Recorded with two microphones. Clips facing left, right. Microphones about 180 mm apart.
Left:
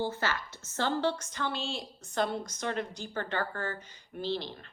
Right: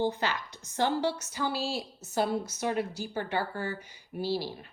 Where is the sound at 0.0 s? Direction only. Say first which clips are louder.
Right 3 dB; 15° right (ahead or behind).